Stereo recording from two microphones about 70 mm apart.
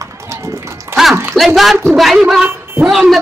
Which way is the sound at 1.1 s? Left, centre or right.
Right.